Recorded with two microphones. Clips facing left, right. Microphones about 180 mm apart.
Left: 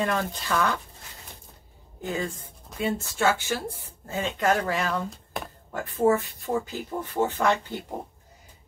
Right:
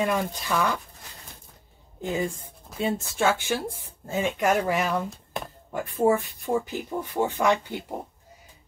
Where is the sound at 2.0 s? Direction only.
20° right (ahead or behind).